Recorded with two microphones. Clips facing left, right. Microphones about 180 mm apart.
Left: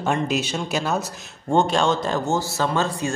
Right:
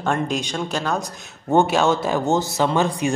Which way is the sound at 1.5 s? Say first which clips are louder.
Right 2 dB; 5° right (ahead or behind).